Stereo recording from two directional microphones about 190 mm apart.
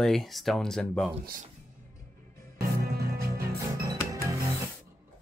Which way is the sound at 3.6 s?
15° right (ahead or behind).